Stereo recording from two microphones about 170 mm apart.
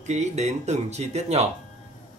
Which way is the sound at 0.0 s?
40° right (ahead or behind).